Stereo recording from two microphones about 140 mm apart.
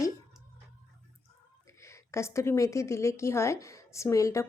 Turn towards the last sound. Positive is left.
turn(degrees=20)  # may be behind; listen again after turning